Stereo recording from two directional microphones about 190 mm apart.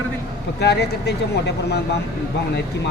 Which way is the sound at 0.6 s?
60° left (ahead or behind).